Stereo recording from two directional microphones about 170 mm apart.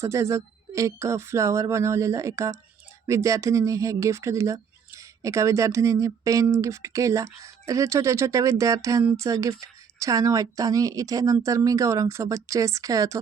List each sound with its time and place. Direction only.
0.0 s speech: 15° right (ahead or behind)